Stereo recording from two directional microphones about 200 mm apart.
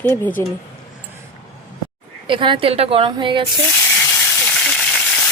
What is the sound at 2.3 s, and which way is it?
A woman's voice, 25° right (ahead or behind).